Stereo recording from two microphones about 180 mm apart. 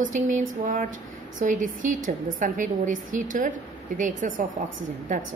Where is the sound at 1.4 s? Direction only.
45° right (ahead or behind).